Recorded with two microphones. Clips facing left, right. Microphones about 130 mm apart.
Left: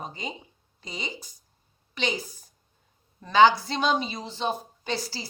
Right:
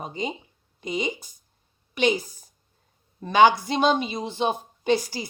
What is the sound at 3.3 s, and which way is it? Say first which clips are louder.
Speech: right 1 dB; 20° right (ahead or behind).